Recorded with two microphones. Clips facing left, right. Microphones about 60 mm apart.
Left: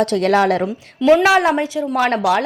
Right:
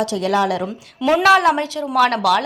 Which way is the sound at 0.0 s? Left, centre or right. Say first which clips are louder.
Left 3 dB; left.